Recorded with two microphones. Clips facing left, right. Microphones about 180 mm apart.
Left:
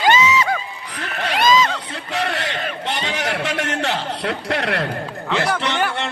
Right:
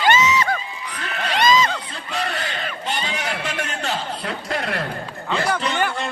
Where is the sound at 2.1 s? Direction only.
65° left (ahead or behind).